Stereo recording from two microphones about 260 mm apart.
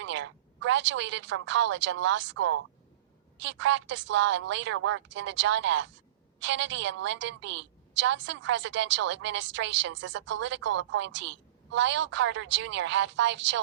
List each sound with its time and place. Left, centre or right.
0.0 s a woman's voice: right